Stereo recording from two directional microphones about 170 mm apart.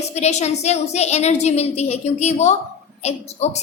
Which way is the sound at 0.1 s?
40° left (ahead or behind).